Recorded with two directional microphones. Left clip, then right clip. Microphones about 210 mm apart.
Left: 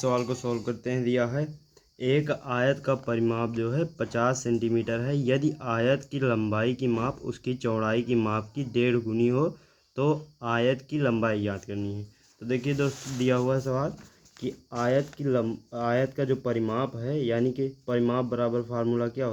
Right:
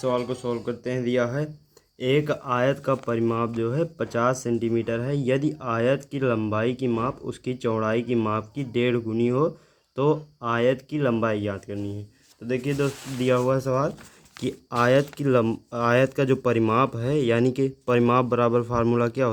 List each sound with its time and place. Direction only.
0.0 s speech: 20° left (ahead or behind)
0.5 s speech: 5° left (ahead or behind); by 13.9 s 20° right (ahead or behind)
14.4 s speech: 40° right (ahead or behind)